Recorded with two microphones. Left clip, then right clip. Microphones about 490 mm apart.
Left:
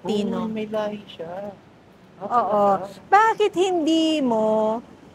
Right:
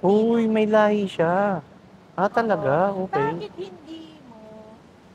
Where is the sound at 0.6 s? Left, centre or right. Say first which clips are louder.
Right 11 dB; right.